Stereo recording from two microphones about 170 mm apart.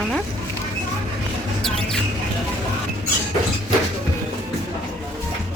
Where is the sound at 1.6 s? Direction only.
Centre (ahead or behind).